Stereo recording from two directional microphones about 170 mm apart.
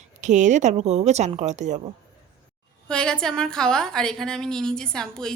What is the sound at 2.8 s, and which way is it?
A woman's voice, 5° left (ahead or behind).